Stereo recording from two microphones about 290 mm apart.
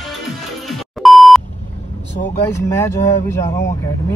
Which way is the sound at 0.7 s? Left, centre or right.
Centre.